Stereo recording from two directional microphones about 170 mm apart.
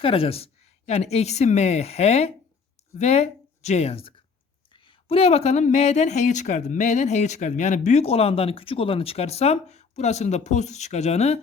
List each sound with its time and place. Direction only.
0.0 s a woman's voice: 35° left (ahead or behind)